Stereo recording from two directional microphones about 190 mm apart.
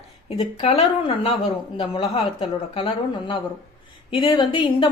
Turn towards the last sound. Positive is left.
turn(degrees=25)  # may be behind; listen again after turning